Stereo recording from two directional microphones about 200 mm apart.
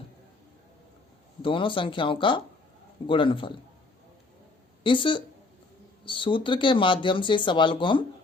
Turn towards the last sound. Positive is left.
turn(degrees=25)  # may be behind; listen again after turning